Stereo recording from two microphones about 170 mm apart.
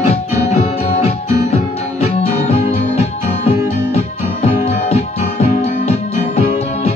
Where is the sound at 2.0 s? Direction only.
40° left (ahead or behind).